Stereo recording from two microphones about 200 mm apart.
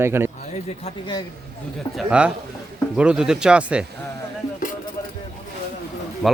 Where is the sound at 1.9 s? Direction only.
5° right (ahead or behind).